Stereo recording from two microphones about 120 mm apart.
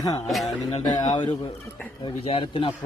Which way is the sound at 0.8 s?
35° left (ahead or behind).